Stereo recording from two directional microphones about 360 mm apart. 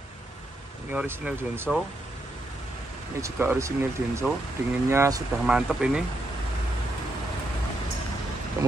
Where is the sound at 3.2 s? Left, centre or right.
Centre.